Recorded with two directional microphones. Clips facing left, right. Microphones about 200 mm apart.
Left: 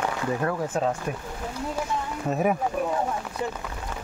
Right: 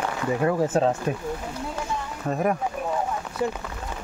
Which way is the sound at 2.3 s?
5° left (ahead or behind).